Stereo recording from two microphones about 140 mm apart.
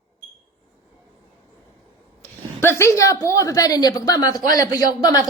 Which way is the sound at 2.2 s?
15° left (ahead or behind).